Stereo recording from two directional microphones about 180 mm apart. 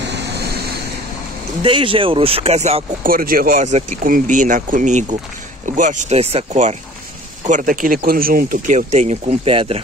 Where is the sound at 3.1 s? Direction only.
55° right (ahead or behind).